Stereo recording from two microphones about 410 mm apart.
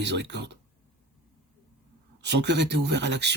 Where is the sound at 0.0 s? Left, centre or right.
Right.